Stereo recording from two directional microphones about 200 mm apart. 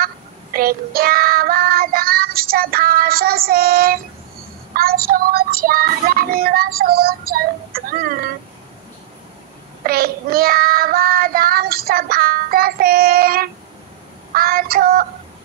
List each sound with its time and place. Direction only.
0.0 s child singing: 45° right (ahead or behind)
9.8 s child singing: 50° right (ahead or behind)